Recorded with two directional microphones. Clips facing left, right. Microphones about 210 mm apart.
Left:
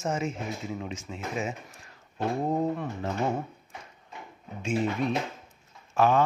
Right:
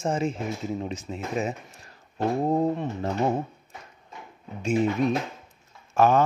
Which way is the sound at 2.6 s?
35° right (ahead or behind).